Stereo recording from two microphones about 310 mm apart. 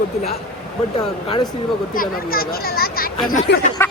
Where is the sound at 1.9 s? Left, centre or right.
Left.